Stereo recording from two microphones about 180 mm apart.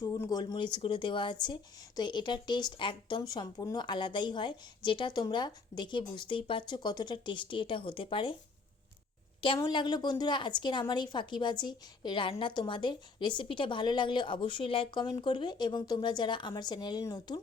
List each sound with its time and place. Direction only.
0.0 s a woman's voice: 20° left (ahead or behind)
9.6 s a woman's voice: 25° left (ahead or behind)